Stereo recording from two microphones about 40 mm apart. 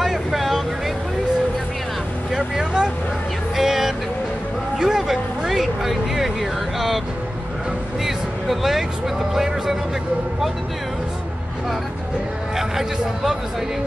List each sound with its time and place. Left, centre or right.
0.0 s vehicle: centre
2.3 s vehicle: centre
4.7 s a sound: centre
8.0 s speech: centre
12.5 s speech: centre